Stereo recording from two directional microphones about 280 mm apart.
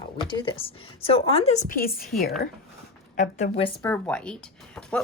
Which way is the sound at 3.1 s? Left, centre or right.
Left.